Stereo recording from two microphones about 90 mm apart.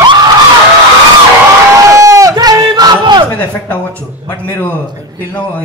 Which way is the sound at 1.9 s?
40° right (ahead or behind).